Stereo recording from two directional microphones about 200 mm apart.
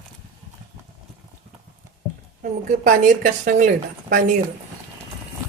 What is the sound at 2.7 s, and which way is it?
A woman's voice, 40° right (ahead or behind).